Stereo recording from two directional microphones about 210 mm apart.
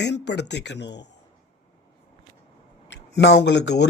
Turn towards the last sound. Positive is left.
turn(degrees=55)  # may be behind; listen again after turning